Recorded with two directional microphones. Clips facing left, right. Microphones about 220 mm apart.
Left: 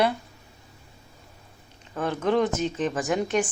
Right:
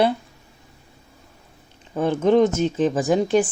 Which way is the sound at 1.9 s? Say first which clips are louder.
Right 7 dB; 25° right (ahead or behind).